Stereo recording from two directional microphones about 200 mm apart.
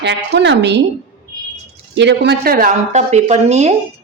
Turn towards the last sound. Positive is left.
turn(degrees=-35)  # may be behind; listen again after turning